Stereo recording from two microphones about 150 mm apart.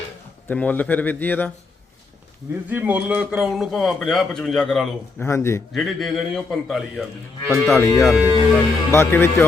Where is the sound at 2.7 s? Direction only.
10° right (ahead or behind); by 4.8 s 5° left (ahead or behind).